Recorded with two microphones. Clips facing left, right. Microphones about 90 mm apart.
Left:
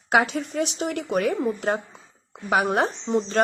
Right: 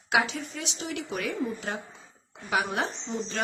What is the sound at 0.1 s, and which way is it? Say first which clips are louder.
A woman's voice: left 5 dB; 45° left (ahead or behind).